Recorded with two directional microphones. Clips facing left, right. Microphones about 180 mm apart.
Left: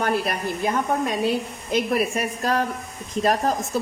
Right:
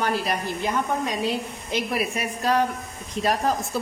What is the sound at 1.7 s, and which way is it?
A woman's voice, 45° left (ahead or behind).